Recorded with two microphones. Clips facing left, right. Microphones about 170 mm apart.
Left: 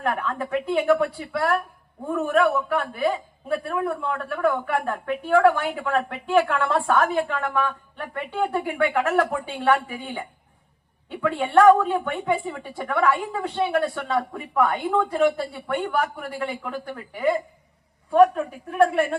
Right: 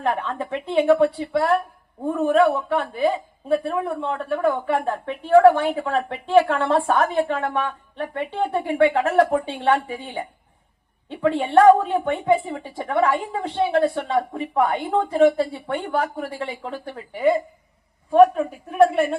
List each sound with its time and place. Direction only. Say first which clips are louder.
0.0 s a woman's voice: right 2 dB; 25° right (ahead or behind)